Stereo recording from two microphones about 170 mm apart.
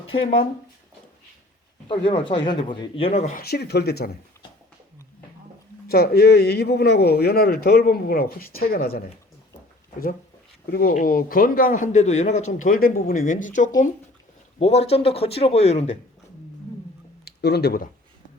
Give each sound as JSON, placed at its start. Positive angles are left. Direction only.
{"t": 0.2, "sound": "speech", "side_deg": 30}
{"t": 1.9, "sound": "speech", "side_deg": 30}
{"t": 3.3, "sound": "speech", "side_deg": 70}
{"t": 5.9, "sound": "speech", "side_deg": 65}
{"t": 10.7, "sound": "a man's voice", "side_deg": 60}
{"t": 14.6, "sound": "speech", "side_deg": 35}
{"t": 17.2, "sound": "speech", "side_deg": 75}